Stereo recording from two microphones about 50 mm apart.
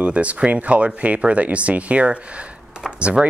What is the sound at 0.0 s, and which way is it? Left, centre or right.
Speech, right.